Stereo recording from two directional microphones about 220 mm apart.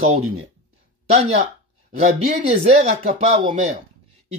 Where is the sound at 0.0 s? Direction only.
30° right (ahead or behind).